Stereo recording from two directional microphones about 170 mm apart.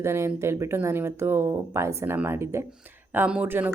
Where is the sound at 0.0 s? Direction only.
15° right (ahead or behind).